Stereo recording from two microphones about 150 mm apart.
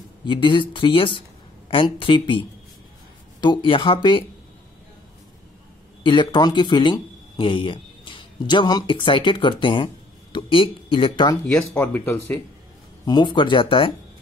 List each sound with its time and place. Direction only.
0.2 s speech: 35° left (ahead or behind)
6.0 s speech: 30° left (ahead or behind)
11.5 s speech: 10° left (ahead or behind)
13.0 s speech: 30° left (ahead or behind)